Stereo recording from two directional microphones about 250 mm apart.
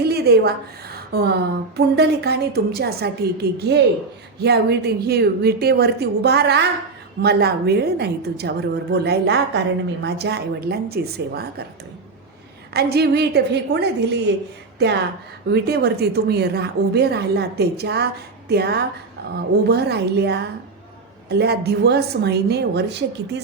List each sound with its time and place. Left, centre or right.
0.0 s a woman's voice: right
12.7 s a woman's voice: right
15.5 s a woman's voice: right